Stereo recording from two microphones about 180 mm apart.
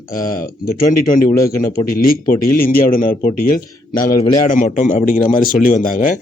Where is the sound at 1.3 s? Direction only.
15° left (ahead or behind).